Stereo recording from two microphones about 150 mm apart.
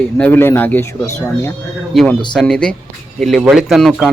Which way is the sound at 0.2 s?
15° left (ahead or behind).